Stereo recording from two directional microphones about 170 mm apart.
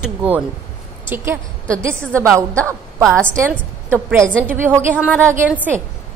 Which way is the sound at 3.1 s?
15° right (ahead or behind).